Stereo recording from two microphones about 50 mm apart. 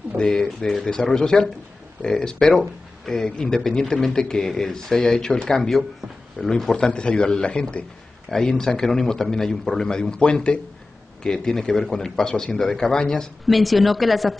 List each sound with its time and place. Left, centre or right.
0.2 s speech: centre
6.7 s a man's voice: left
8.3 s speech: centre
13.5 s a woman's voice: centre